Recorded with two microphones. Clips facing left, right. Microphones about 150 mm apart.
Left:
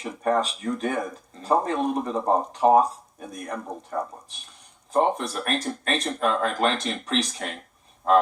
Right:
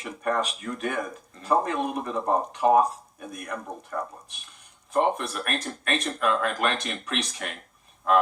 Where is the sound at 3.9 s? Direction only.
35° left (ahead or behind).